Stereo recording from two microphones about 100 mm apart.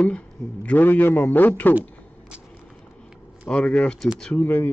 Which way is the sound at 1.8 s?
10° right (ahead or behind).